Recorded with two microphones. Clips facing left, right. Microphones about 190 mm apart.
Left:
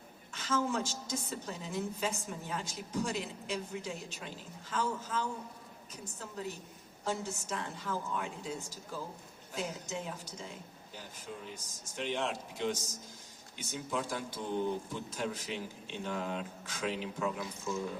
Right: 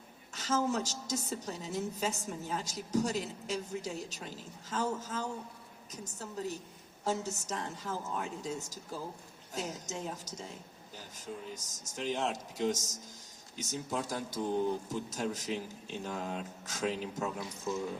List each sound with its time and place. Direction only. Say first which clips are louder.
0.3 s a woman's voice: right 1 dB; 40° right (ahead or behind)
11.5 s a woman's voice: even; 40° right (ahead or behind)